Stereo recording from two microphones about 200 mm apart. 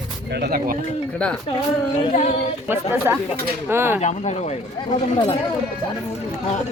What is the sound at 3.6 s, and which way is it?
Speech, 10° right (ahead or behind).